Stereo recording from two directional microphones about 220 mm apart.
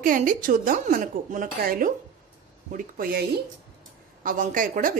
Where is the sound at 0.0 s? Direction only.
35° right (ahead or behind).